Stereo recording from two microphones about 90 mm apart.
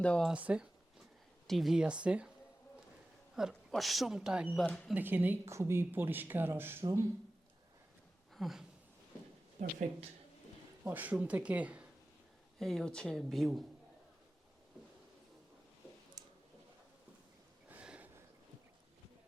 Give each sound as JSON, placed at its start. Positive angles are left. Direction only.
{"t": 0.0, "sound": "speech", "side_deg": 10}
{"t": 0.3, "sound": "speech", "side_deg": -10}
{"t": 1.5, "sound": "speech", "side_deg": 0}
{"t": 3.3, "sound": "speech", "side_deg": 0}
{"t": 4.6, "sound": "speech", "side_deg": 15}
{"t": 4.9, "sound": "speech", "side_deg": -20}
{"t": 5.5, "sound": "speech", "side_deg": -30}
{"t": 8.4, "sound": "a sound", "side_deg": -5}
{"t": 10.8, "sound": "speech", "side_deg": -20}
{"t": 12.5, "sound": "speech", "side_deg": 5}
{"t": 16.2, "sound": "a sound", "side_deg": -45}
{"t": 17.7, "sound": "a sound", "side_deg": -15}